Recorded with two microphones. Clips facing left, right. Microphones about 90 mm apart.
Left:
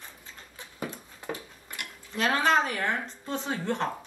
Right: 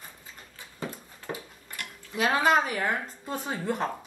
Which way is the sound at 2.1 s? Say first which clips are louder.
Right 1 dB; 5° right (ahead or behind).